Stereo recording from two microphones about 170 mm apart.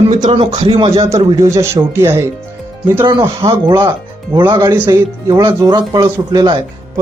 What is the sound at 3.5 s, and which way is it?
Speech, 25° right (ahead or behind).